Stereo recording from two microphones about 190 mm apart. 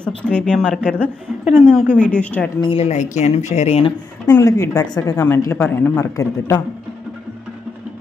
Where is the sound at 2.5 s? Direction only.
30° left (ahead or behind).